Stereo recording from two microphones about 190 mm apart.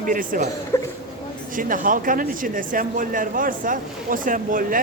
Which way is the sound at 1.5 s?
45° right (ahead or behind).